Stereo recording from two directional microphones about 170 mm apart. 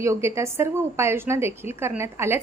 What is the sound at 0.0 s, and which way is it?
A woman's voice, 15° right (ahead or behind).